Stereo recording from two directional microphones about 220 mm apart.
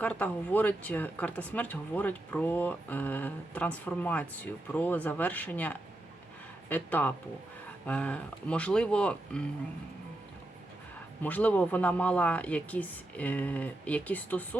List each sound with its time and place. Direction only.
0.0 s speech: 5° left (ahead or behind)
11.2 s speech: 5° left (ahead or behind)